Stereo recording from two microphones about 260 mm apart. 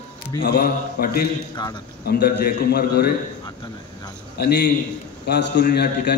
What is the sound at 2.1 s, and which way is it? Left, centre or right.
A man's voice, left.